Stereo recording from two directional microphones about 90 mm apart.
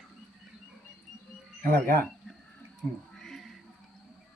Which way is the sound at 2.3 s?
Centre (ahead or behind).